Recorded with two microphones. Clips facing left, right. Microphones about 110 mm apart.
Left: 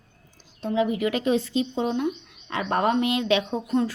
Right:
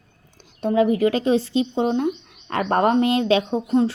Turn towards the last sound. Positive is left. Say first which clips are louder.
# right 5 dB
turn(degrees=-30)  # may be behind; listen again after turning